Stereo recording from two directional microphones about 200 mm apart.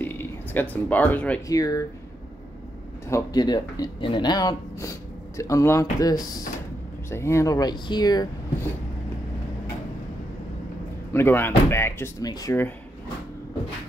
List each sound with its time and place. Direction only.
0.0 s a man's voice: 10° left (ahead or behind)
3.1 s speech: 15° left (ahead or behind)
11.1 s speech: 10° left (ahead or behind)